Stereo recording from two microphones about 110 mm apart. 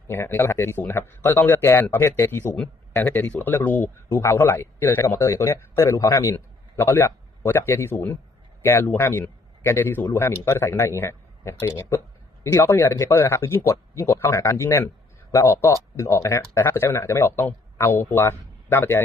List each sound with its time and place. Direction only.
0.1 s a man's voice: 20° left (ahead or behind)